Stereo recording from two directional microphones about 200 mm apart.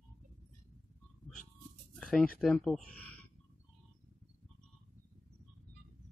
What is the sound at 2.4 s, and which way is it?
Speech, 5° left (ahead or behind).